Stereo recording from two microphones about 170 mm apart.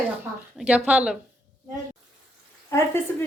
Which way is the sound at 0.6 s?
10° right (ahead or behind).